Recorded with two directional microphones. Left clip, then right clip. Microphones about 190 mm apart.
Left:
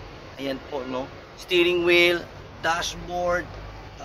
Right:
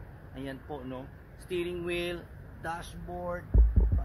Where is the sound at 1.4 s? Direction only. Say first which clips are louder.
Left 14 dB; 15° right (ahead or behind).